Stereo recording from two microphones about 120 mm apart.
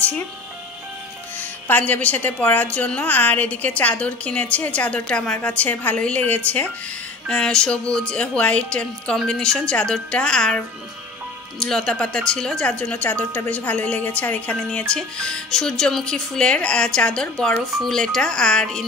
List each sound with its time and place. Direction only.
1.4 s a woman's voice: 15° left (ahead or behind)
11.6 s a woman's voice: 5° left (ahead or behind)